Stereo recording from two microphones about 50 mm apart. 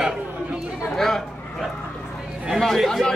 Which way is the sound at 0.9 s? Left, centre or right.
Centre.